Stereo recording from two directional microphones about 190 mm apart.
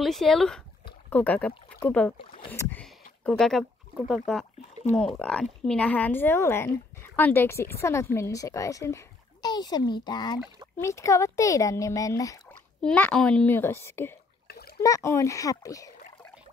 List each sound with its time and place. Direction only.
0.0 s speech: centre (ahead or behind)
2.8 s a sound: 5° left (ahead or behind)
4.1 s speech: centre (ahead or behind); by 12.4 s 15° left (ahead or behind)
12.8 s speech: 5° left (ahead or behind)